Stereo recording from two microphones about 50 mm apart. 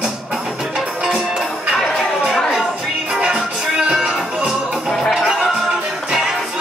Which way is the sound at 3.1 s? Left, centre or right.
Centre.